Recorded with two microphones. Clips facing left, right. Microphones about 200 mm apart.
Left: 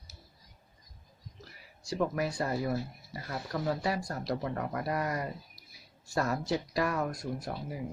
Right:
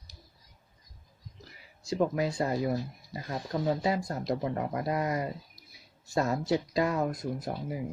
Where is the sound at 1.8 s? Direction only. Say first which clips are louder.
Right 3 dB; 20° right (ahead or behind).